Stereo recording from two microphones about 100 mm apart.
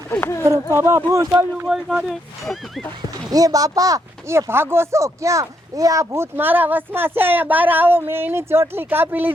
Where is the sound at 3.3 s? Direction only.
40° right (ahead or behind).